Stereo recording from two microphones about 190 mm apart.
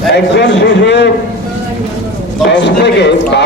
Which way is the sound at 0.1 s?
65° left (ahead or behind).